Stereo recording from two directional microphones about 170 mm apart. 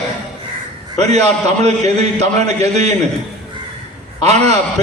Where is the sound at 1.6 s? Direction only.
40° right (ahead or behind).